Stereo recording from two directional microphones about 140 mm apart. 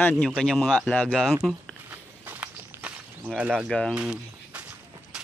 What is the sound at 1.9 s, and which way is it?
Walk, 10° right (ahead or behind).